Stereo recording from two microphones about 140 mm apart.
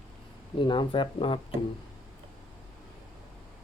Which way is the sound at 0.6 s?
35° left (ahead or behind).